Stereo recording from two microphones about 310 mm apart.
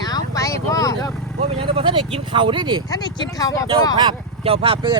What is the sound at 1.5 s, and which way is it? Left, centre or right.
Speech, centre.